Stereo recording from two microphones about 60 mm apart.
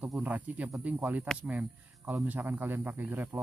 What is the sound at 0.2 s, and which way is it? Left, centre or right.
Speech, right.